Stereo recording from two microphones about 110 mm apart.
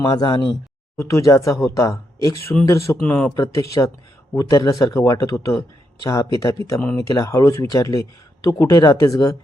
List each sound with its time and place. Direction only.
0.0 s speech: 30° left (ahead or behind)
0.3 s speech: 45° left (ahead or behind)
0.9 s speech: 30° left (ahead or behind)
3.0 s speech: 10° left (ahead or behind)
3.3 s speech: 30° left (ahead or behind)
6.7 s speech: 20° left (ahead or behind)